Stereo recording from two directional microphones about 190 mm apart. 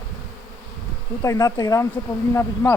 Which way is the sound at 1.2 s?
15° left (ahead or behind).